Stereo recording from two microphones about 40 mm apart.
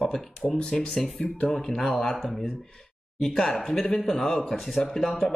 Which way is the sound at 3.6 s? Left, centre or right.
Centre.